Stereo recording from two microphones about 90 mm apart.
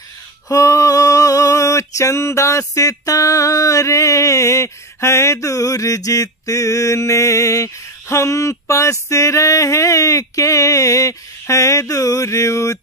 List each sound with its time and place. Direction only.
0.5 s male singing: 35° left (ahead or behind)